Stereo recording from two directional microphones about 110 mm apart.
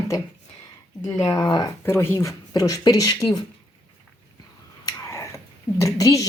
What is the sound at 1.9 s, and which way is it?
A woman's voice, 25° left (ahead or behind).